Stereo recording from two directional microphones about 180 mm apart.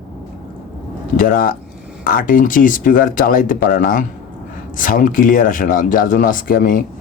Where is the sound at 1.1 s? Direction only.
50° left (ahead or behind).